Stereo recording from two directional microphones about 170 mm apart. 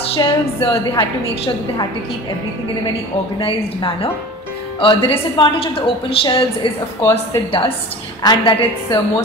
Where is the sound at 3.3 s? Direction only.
30° left (ahead or behind).